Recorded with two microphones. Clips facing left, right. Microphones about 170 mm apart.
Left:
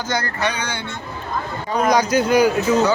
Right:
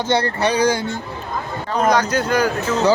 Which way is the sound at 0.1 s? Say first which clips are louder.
Right 5 dB; 30° right (ahead or behind).